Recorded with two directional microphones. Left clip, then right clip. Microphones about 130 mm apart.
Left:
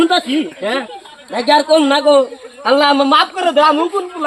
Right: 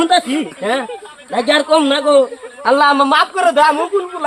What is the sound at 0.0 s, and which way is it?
A man's voice, 25° right (ahead or behind).